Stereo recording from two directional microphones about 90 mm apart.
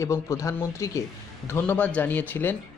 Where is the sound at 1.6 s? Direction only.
15° left (ahead or behind).